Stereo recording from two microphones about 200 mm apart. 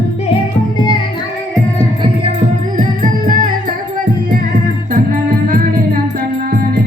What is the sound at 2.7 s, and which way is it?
Music, 40° right (ahead or behind).